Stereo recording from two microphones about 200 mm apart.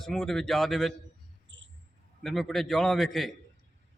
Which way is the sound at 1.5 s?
65° right (ahead or behind).